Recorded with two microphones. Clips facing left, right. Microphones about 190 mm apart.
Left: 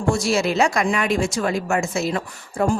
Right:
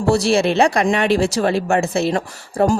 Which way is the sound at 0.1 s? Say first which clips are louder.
Right 5 dB; 30° right (ahead or behind).